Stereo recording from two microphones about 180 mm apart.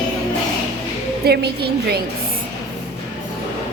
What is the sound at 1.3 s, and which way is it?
Speech, 65° right (ahead or behind).